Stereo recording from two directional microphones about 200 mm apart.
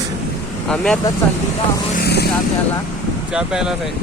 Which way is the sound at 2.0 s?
55° left (ahead or behind).